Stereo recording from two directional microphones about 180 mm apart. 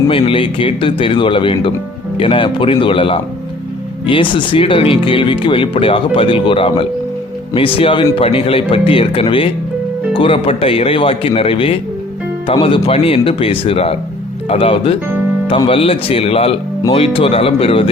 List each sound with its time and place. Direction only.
0.1 s speech: 30° left (ahead or behind)